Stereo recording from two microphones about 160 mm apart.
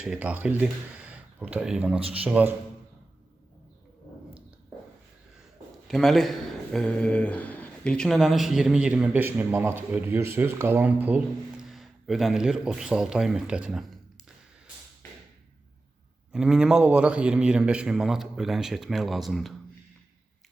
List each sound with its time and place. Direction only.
0.0 s speech: 5° right (ahead or behind)
2.0 s speech: 35° right (ahead or behind)
2.2 s a man's voice: 10° right (ahead or behind)
5.9 s speech: centre (ahead or behind)
16.3 s speech: 5° right (ahead or behind)